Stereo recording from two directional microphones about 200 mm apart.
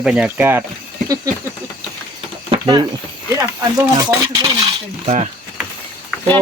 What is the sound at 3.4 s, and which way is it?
Speech, 20° right (ahead or behind).